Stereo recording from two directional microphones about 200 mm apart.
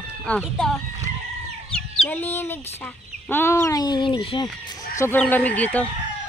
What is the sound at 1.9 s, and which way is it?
Speech, 10° left (ahead or behind).